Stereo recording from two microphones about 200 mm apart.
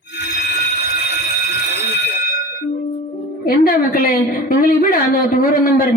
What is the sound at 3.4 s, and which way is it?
A man's voice, 50° left (ahead or behind).